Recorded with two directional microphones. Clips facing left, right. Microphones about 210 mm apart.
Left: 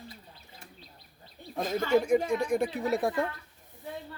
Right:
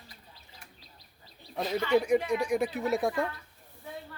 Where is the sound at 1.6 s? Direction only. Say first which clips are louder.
Left 1 dB; 45° left (ahead or behind).